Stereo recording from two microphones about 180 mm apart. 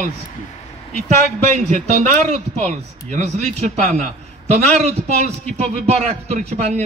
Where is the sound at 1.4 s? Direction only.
40° right (ahead or behind).